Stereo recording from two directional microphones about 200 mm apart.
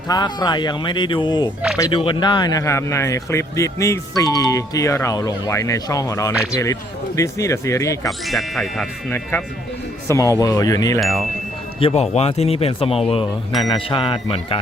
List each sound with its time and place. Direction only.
0.1 s speech: 20° left (ahead or behind)
8.2 s speech: centre (ahead or behind); by 11.0 s 15° left (ahead or behind)
11.0 s speech: centre (ahead or behind)
11.8 s speech: 30° left (ahead or behind)